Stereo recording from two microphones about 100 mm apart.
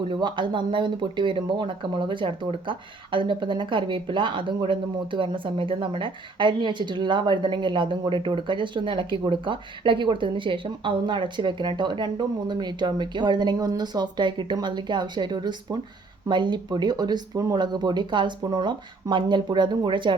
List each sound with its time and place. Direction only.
0.1 s speech: 50° right (ahead or behind)